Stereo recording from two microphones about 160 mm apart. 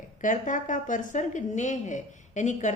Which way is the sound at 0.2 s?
55° left (ahead or behind).